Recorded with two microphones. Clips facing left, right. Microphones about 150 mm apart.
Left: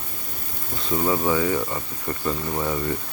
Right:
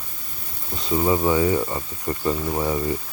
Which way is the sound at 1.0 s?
15° right (ahead or behind).